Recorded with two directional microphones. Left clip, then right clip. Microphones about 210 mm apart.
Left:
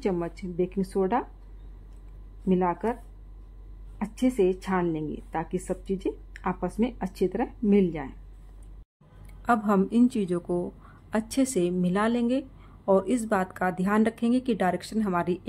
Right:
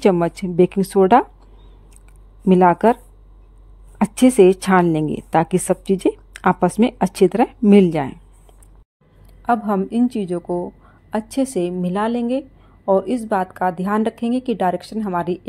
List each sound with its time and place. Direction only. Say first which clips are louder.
0.0 s a woman's voice: right 13 dB; 45° right (ahead or behind)
2.4 s a woman's voice: right 13 dB; 45° right (ahead or behind)
4.0 s a woman's voice: right 13 dB; 45° right (ahead or behind)
9.4 s a woman's voice: right 5 dB; 10° right (ahead or behind)